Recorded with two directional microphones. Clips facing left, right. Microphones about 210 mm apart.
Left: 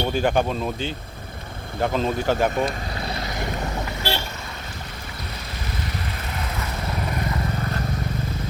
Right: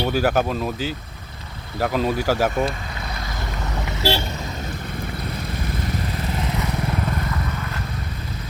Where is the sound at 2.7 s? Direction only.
35° left (ahead or behind).